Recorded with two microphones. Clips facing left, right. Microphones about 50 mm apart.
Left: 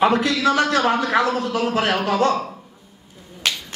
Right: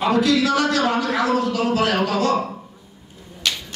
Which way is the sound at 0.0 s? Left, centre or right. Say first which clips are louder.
Left 1 dB; left.